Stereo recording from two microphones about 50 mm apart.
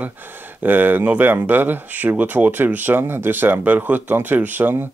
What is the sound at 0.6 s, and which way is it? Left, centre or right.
Speech, right.